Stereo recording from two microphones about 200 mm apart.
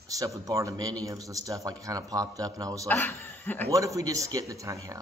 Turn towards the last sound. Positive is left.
turn(degrees=-15)  # may be behind; listen again after turning